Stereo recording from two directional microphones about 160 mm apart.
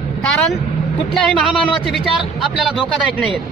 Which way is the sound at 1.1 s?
Centre (ahead or behind).